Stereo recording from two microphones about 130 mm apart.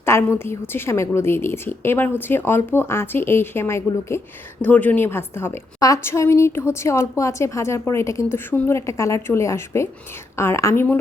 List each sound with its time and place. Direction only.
0.0 s a woman's voice: 20° left (ahead or behind)